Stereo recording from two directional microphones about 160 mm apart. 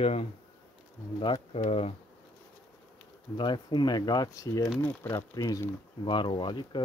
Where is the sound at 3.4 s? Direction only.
30° left (ahead or behind).